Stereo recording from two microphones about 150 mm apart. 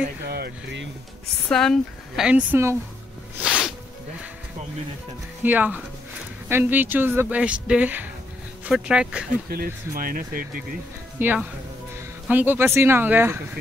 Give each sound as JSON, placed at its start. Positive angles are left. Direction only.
{"t": 1.5, "sound": "speech", "side_deg": 5}
{"t": 3.4, "sound": "music", "side_deg": -5}
{"t": 5.4, "sound": "speech", "side_deg": -10}
{"t": 9.5, "sound": "speech", "side_deg": -75}
{"t": 11.1, "sound": "speech", "side_deg": -10}